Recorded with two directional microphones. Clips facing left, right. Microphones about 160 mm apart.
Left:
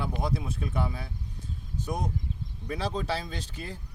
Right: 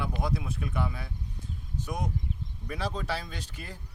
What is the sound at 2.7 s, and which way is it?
Speech, 25° left (ahead or behind).